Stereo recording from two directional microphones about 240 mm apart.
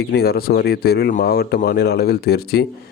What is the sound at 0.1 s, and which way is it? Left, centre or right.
Speech, left.